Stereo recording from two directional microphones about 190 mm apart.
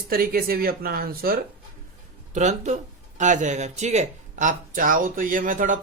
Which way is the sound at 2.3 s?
40° right (ahead or behind).